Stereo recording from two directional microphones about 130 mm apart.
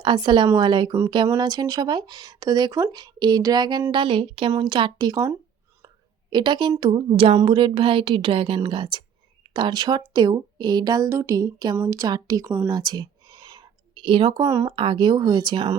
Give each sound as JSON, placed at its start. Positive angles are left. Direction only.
{"t": 0.0, "sound": "a woman's voice", "side_deg": -35}
{"t": 12.6, "sound": "a sound", "side_deg": -30}
{"t": 14.4, "sound": "a woman's voice", "side_deg": -20}
{"t": 14.8, "sound": "speech", "side_deg": -35}